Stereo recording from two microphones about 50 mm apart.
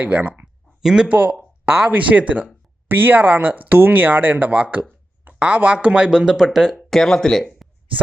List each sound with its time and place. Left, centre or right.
0.0 s speech: right
0.8 s speech: centre
1.0 s speech: right; by 6.7 s centre
6.7 s speech: centre